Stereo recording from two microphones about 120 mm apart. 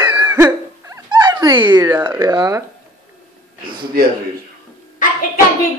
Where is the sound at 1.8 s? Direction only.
15° right (ahead or behind).